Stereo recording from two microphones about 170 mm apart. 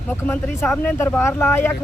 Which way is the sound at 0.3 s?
10° left (ahead or behind).